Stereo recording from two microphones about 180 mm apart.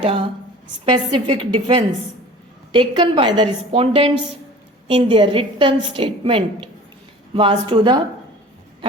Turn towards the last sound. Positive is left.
turn(degrees=-25)  # may be behind; listen again after turning